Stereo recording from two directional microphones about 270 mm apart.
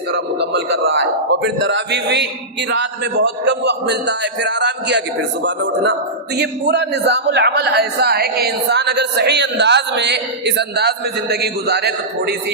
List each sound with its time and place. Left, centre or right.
0.1 s a man's voice: right